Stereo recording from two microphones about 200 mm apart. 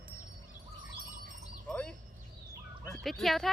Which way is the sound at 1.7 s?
5° left (ahead or behind).